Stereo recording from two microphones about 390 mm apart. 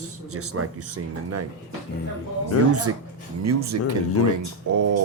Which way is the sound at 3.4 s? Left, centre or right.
Right.